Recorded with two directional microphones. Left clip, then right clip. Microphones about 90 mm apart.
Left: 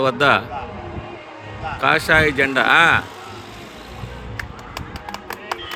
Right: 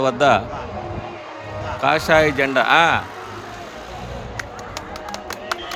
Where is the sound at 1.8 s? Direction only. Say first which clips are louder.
Even; 20° right (ahead or behind).